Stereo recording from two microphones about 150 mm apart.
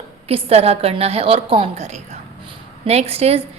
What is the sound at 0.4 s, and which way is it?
A woman's voice, 45° right (ahead or behind).